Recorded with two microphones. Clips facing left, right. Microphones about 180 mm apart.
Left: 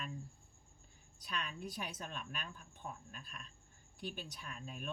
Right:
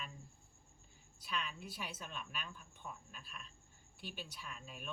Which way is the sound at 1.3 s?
45° left (ahead or behind).